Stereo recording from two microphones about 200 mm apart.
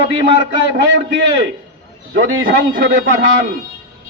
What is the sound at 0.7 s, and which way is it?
A man's voice, 65° right (ahead or behind).